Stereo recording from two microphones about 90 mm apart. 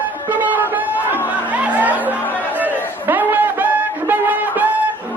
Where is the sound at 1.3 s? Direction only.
20° right (ahead or behind).